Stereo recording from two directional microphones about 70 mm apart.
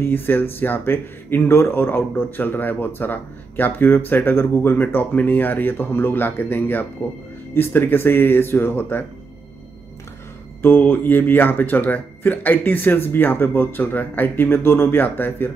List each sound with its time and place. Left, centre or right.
0.1 s speech: left
10.6 s speech: left